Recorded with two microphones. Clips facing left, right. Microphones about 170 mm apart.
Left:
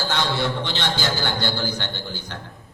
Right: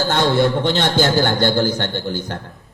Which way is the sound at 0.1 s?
50° right (ahead or behind).